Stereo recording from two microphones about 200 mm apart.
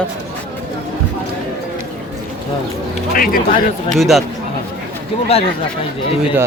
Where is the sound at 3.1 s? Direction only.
45° left (ahead or behind).